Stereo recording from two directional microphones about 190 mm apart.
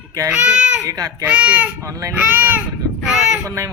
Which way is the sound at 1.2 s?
5° right (ahead or behind).